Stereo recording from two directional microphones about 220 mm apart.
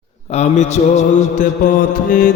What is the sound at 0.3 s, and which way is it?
Mantra, 30° left (ahead or behind).